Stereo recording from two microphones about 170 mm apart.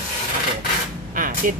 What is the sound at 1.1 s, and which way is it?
Speech, 55° right (ahead or behind).